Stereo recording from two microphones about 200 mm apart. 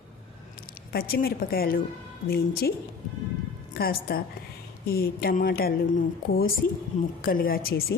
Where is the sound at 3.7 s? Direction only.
50° left (ahead or behind).